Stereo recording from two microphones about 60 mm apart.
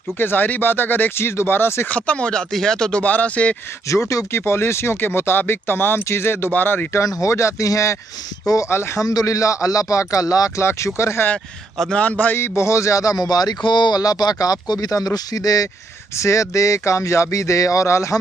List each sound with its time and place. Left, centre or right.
0.2 s speech: left
1.9 s speech: left
3.0 s speech: left
3.9 s speech: left
7.0 s speech: left
8.6 s speech: left
9.0 s speech: left
10.6 s speech: left
12.0 s speech: left
12.4 s speech: left
16.2 s speech: left